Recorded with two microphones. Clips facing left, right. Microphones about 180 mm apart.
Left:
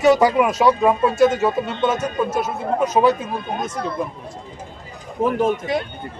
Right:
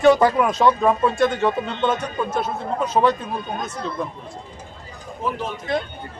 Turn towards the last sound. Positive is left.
turn(degrees=50)  # may be behind; listen again after turning